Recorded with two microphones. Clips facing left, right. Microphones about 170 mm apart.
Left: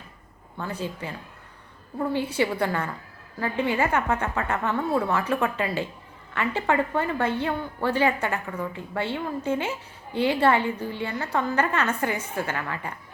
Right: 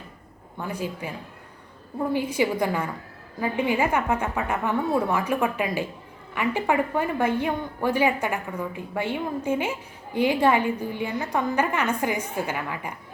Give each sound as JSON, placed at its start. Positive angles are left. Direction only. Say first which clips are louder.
{"t": 0.6, "sound": "a woman's voice", "louder": "right 1 dB", "side_deg": -10}